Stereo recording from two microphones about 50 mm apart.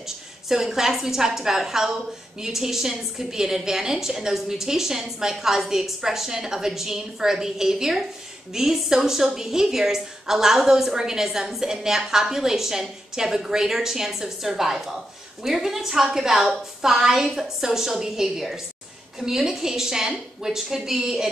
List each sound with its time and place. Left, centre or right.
0.5 s a woman's voice: centre